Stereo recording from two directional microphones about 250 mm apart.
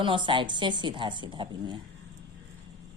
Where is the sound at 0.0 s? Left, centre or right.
Centre.